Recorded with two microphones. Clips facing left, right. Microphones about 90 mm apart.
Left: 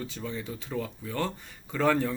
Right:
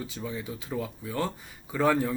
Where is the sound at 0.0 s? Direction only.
10° right (ahead or behind).